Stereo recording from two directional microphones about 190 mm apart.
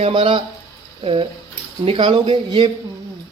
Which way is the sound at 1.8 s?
30° right (ahead or behind).